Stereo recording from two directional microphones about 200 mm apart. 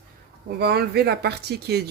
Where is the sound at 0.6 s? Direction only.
55° right (ahead or behind).